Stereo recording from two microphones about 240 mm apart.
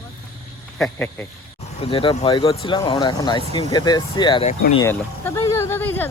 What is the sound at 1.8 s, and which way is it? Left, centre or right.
Speech, left.